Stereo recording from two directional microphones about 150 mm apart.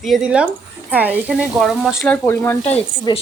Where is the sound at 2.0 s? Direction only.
15° left (ahead or behind).